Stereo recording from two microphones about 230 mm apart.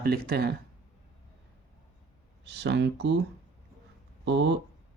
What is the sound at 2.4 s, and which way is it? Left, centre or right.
Speech, right.